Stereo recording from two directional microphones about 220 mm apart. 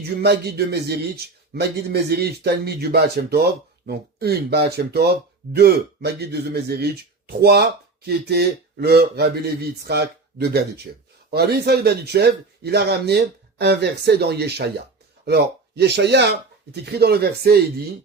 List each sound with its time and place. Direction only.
0.2 s a man's voice: 45° right (ahead or behind)